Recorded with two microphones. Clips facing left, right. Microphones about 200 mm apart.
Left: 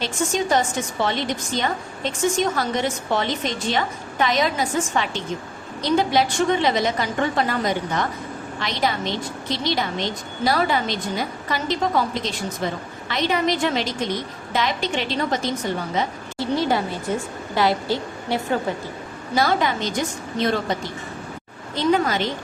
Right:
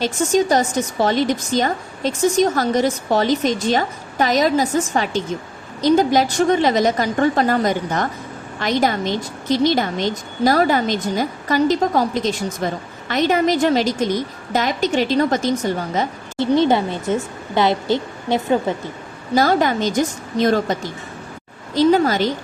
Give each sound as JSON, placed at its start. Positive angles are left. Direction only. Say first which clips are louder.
{"t": 0.0, "sound": "a woman's voice", "louder": "right 6 dB", "side_deg": -40}
{"t": 16.4, "sound": "a woman's voice", "louder": "right 6 dB", "side_deg": -25}
{"t": 19.3, "sound": "a woman's voice", "louder": "right 5 dB", "side_deg": -40}
{"t": 21.8, "sound": "a woman's voice", "louder": "right 5 dB", "side_deg": -40}